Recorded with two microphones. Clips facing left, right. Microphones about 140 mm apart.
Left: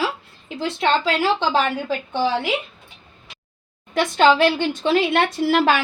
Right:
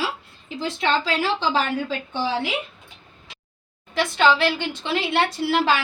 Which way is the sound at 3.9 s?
45° left (ahead or behind).